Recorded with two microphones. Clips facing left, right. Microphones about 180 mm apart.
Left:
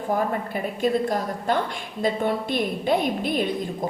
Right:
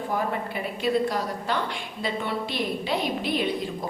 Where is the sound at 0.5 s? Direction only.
45° left (ahead or behind).